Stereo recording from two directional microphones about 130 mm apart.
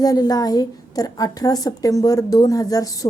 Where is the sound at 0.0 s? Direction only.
30° left (ahead or behind).